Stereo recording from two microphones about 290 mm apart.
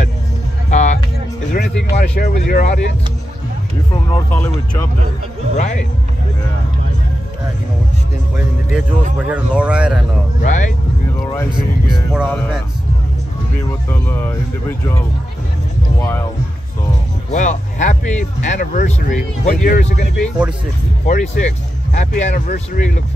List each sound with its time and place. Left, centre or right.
0.7 s music: left
1.9 s speech: left
3.9 s speech: centre
5.6 s speech: left
9.3 s speech: centre
10.4 s speech: left
12.1 s speech: centre
13.8 s speech: centre
16.0 s a sound: centre
17.3 s speech: left
20.2 s speech: centre
21.0 s speech: left